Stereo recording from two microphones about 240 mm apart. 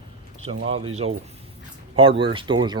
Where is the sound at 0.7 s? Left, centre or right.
Right.